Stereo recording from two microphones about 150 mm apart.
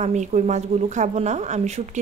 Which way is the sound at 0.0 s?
50° right (ahead or behind).